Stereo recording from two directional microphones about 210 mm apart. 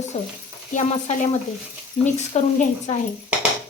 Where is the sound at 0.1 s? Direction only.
30° left (ahead or behind).